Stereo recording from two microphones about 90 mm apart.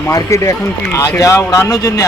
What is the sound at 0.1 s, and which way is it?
A man's voice, 35° left (ahead or behind).